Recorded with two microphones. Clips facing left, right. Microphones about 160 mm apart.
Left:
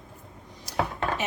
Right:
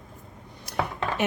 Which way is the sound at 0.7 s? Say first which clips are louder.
Left 1 dB; 60° right (ahead or behind).